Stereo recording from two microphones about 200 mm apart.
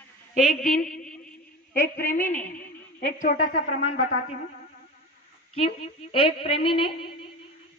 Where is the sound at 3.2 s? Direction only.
35° left (ahead or behind).